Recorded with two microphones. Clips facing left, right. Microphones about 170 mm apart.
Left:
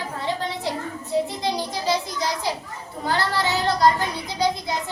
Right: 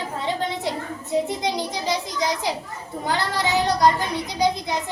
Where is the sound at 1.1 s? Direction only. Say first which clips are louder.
Right 1 dB; 20° right (ahead or behind).